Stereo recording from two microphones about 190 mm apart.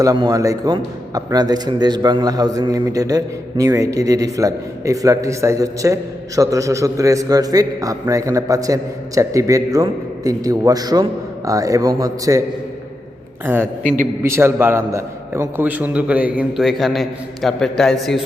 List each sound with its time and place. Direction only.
0.0 s a man's voice: 20° right (ahead or behind)
13.4 s a man's voice: 10° right (ahead or behind)
13.8 s a man's voice: 40° right (ahead or behind)
14.2 s a man's voice: 15° right (ahead or behind)